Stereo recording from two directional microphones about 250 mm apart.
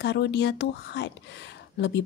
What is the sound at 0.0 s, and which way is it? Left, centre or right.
A woman's voice, left.